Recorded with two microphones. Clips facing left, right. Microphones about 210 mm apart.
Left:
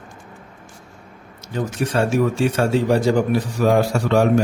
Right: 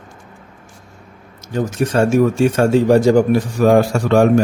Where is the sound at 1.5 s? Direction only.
45° right (ahead or behind).